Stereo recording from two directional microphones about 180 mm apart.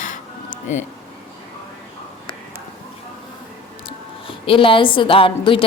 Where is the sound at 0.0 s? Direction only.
45° left (ahead or behind).